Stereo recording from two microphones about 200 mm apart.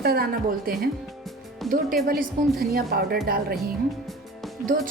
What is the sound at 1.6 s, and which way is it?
Speech, centre (ahead or behind).